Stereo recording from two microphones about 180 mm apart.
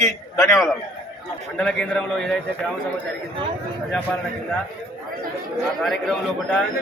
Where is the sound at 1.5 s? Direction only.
5° left (ahead or behind).